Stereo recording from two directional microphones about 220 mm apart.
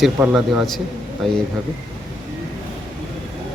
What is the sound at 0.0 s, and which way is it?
Speech, centre (ahead or behind).